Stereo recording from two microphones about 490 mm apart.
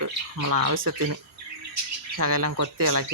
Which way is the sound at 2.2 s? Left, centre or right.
Right.